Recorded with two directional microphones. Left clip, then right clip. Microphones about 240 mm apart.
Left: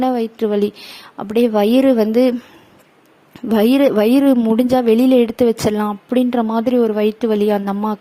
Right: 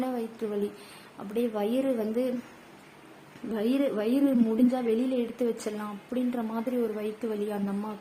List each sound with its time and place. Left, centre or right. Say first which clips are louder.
0.0 s a woman's voice: left 15 dB; left
3.5 s a woman's voice: left 15 dB; left